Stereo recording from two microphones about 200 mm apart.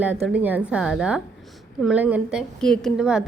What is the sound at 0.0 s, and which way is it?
A woman's voice, 5° right (ahead or behind).